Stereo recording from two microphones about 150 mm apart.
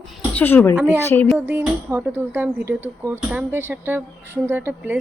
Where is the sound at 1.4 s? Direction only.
15° right (ahead or behind).